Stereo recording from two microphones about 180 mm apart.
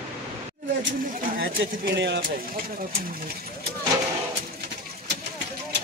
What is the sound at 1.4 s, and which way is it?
Speech, 70° right (ahead or behind).